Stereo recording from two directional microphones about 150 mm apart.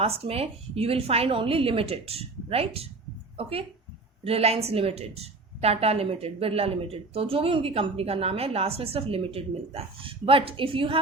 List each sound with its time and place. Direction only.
0.0 s a woman's voice: 40° right (ahead or behind)